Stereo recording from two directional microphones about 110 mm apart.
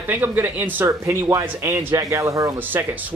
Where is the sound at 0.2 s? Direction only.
15° right (ahead or behind).